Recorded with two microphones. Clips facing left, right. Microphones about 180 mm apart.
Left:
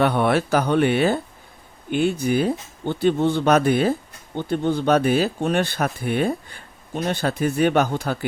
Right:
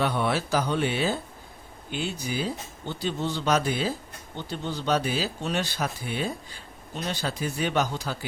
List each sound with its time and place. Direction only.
0.0 s speech: 60° left (ahead or behind)